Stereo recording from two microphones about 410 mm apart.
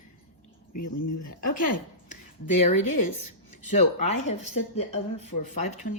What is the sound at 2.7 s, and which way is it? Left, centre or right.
Speech, left.